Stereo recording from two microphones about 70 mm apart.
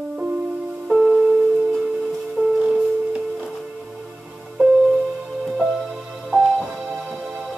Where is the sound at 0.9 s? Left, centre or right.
Centre.